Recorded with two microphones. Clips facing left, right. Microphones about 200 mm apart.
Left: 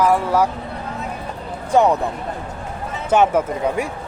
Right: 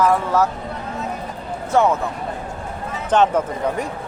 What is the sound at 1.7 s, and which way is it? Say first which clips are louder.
Speech: left 2 dB; 15° left (ahead or behind).